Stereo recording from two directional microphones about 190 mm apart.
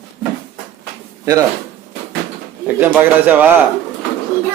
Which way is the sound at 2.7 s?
10° right (ahead or behind).